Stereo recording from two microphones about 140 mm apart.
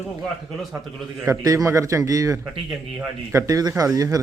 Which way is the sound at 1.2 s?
25° right (ahead or behind).